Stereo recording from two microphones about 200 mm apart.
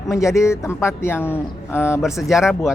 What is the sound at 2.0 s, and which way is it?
Speech, centre (ahead or behind).